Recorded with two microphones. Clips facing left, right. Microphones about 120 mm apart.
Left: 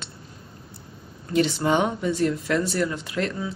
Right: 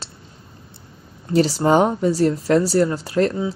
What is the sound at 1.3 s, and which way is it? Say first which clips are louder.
Speech: right 5 dB; 35° right (ahead or behind).